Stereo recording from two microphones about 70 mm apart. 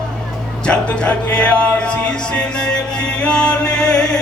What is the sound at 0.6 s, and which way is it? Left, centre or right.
Music, centre.